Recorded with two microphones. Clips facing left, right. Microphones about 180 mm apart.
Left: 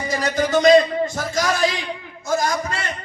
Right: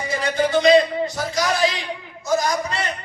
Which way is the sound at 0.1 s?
40° left (ahead or behind).